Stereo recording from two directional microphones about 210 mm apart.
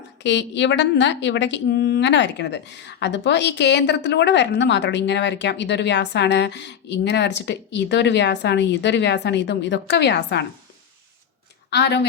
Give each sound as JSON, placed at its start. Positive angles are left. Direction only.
{"t": 0.2, "sound": "a woman's voice", "side_deg": 55}
{"t": 11.7, "sound": "a woman's voice", "side_deg": 55}